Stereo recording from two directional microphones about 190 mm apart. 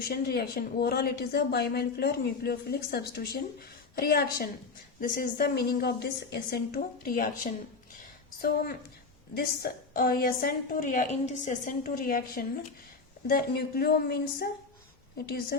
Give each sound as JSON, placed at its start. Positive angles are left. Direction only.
{"t": 0.1, "sound": "a woman's voice", "side_deg": 55}